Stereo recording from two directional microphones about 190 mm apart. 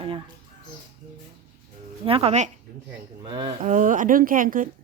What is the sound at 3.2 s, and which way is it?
Speech, 25° right (ahead or behind).